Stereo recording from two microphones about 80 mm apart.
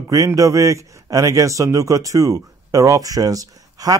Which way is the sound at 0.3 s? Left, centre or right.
Right.